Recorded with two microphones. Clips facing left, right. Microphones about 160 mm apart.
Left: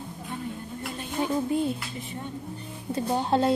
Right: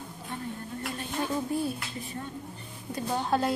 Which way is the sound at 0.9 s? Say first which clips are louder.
Left 4 dB; 20° left (ahead or behind).